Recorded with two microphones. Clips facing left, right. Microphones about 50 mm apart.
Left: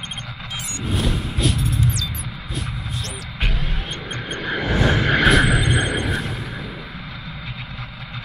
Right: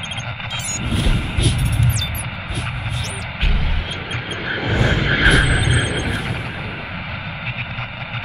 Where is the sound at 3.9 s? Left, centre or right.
Right.